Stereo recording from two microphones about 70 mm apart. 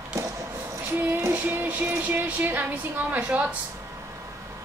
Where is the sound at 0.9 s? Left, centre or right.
Right.